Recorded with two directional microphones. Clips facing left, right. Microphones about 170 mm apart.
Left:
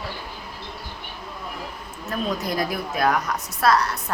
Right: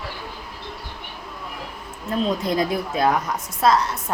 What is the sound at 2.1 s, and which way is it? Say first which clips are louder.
A woman's voice: right 4 dB; 25° right (ahead or behind).